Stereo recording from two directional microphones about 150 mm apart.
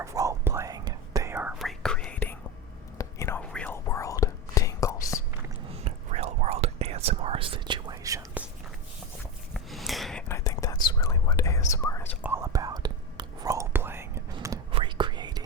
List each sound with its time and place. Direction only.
0.0 s whispering: 20° right (ahead or behind)
1.5 s whispering: 5° left (ahead or behind)
3.8 s whispering: 20° left (ahead or behind)
5.7 s whispering: 45° right (ahead or behind); by 8.2 s 25° right (ahead or behind)
9.7 s whispering: centre (ahead or behind)
10.2 s whispering: 20° left (ahead or behind)
12.2 s whispering: 20° right (ahead or behind)
14.7 s whispering: 35° right (ahead or behind)